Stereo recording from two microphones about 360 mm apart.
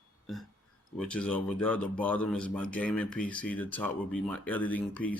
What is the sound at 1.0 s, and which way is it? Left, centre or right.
Speech, centre.